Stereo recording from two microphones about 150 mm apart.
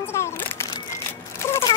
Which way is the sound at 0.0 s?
15° left (ahead or behind).